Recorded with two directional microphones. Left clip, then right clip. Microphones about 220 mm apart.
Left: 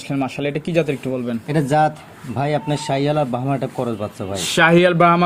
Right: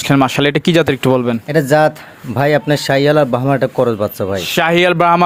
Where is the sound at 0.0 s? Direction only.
45° right (ahead or behind).